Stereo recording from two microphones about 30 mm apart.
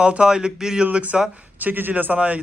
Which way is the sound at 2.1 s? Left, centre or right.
Right.